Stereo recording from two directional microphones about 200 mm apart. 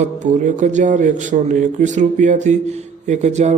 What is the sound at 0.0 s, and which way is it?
Speech, 35° right (ahead or behind).